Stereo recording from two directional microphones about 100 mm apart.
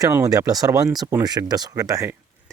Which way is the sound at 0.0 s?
35° right (ahead or behind).